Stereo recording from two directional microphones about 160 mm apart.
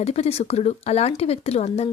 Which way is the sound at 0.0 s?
40° left (ahead or behind).